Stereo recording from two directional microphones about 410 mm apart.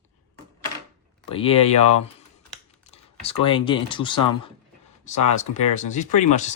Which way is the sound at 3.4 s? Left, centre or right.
Centre.